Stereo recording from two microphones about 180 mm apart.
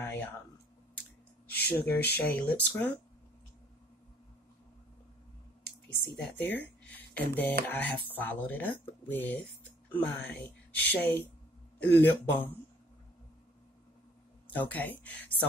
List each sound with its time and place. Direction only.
1.5 s speech: 65° left (ahead or behind)
2.1 s speech: 10° left (ahead or behind)
6.0 s speech: 5° left (ahead or behind)
14.5 s speech: 10° left (ahead or behind)